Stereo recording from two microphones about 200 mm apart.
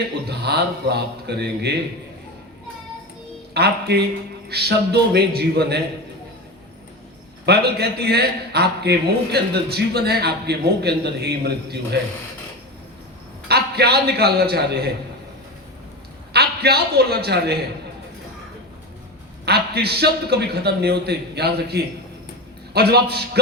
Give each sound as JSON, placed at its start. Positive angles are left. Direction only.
{"t": 0.3, "sound": "a man's voice", "side_deg": -55}
{"t": 3.5, "sound": "a man's voice", "side_deg": -55}
{"t": 7.4, "sound": "a man's voice", "side_deg": -55}
{"t": 13.5, "sound": "a man's voice", "side_deg": -55}
{"t": 16.3, "sound": "a man's voice", "side_deg": -55}
{"t": 19.5, "sound": "a man's voice", "side_deg": -55}